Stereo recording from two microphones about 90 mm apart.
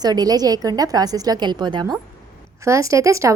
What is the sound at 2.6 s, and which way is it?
Speech, 35° right (ahead or behind).